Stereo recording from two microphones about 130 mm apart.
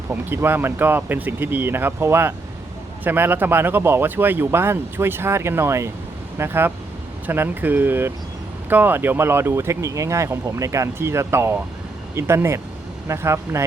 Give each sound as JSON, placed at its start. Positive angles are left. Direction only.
{"t": 0.1, "sound": "speech", "side_deg": -15}